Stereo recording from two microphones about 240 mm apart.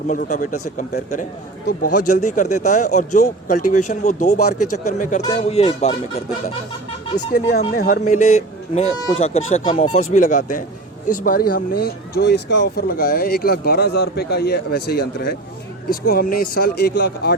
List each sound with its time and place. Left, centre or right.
0.1 s speech: left
1.9 s speech: left
2.1 s speech: left
4.5 s speech: left
4.8 s speech: left